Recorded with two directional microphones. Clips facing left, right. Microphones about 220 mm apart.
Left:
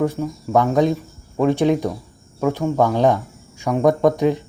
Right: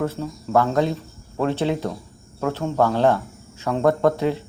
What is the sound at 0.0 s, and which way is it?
Speech, 15° left (ahead or behind).